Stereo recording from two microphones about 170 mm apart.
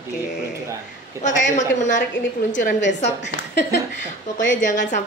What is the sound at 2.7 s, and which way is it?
Speech, 90° left.